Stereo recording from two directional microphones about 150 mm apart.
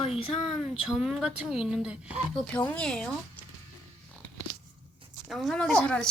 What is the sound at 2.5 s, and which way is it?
Speech, 10° left (ahead or behind).